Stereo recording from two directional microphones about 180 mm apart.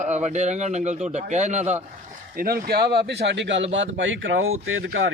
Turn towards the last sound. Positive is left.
turn(degrees=-90)